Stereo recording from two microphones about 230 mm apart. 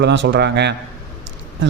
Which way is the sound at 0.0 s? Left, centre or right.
Right.